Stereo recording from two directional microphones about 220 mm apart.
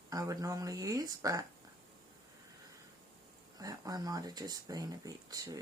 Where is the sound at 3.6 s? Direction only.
15° right (ahead or behind).